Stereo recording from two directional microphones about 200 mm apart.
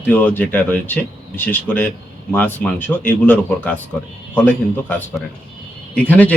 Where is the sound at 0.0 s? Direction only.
10° left (ahead or behind).